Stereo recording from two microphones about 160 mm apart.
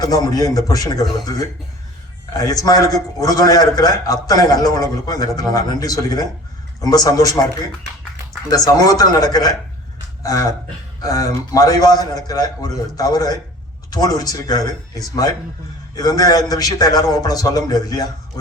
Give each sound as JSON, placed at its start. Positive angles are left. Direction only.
{"t": 0.0, "sound": "a man's voice", "side_deg": 25}
{"t": 2.4, "sound": "a man's voice", "side_deg": 25}
{"t": 8.4, "sound": "a man's voice", "side_deg": 25}
{"t": 11.0, "sound": "a man's voice", "side_deg": 25}